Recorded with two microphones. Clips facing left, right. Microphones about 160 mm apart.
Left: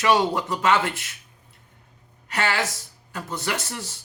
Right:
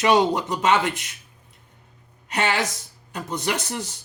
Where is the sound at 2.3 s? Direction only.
20° right (ahead or behind).